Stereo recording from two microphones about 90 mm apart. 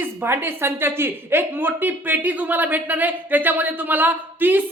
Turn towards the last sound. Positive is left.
turn(degrees=-20)  # may be behind; listen again after turning